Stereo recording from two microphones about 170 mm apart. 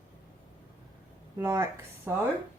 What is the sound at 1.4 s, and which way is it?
Speech, 15° right (ahead or behind).